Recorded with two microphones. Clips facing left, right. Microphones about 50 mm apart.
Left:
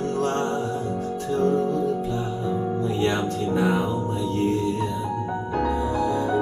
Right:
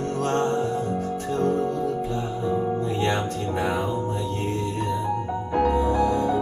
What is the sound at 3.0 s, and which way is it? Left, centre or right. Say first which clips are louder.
Music: left 1 dB; right.